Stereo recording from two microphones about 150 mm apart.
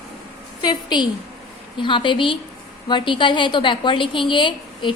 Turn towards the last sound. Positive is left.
turn(degrees=30)  # may be behind; listen again after turning